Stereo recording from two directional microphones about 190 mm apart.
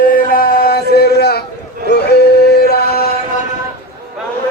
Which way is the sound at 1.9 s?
60° left (ahead or behind).